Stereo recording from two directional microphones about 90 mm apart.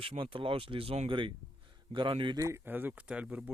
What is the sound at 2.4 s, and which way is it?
Speech, 35° right (ahead or behind).